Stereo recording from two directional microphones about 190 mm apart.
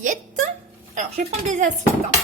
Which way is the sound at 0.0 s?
40° right (ahead or behind).